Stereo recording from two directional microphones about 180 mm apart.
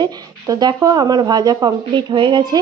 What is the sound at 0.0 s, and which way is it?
A woman's voice, 20° right (ahead or behind).